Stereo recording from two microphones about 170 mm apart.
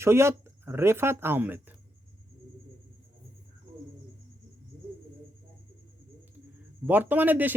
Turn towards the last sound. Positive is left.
turn(degrees=-10)  # may be behind; listen again after turning